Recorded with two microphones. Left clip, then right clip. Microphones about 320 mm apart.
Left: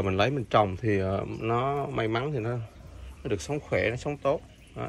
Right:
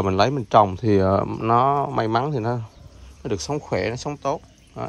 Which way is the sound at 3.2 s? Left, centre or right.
Centre.